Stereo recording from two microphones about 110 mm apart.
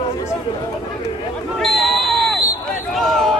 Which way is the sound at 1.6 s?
Centre (ahead or behind).